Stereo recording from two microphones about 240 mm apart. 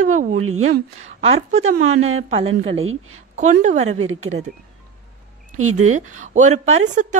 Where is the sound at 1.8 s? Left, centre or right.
Right.